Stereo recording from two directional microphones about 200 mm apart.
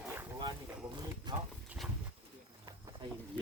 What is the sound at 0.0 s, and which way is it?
Boat, 10° right (ahead or behind).